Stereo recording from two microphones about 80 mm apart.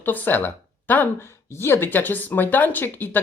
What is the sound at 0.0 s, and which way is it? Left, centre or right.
Speech, left.